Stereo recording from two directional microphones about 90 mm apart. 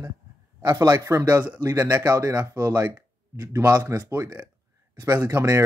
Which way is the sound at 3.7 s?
40° right (ahead or behind).